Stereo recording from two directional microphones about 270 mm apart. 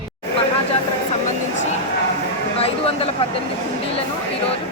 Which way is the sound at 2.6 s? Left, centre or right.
Left.